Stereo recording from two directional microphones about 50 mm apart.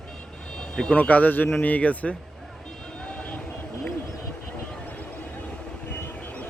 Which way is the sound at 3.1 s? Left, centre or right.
Left.